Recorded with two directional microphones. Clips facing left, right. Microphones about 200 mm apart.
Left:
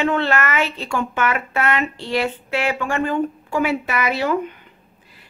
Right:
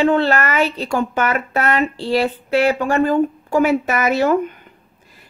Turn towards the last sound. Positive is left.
turn(degrees=-45)  # may be behind; listen again after turning